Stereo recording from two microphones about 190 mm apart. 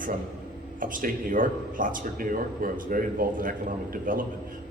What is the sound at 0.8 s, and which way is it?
Speech, 45° right (ahead or behind).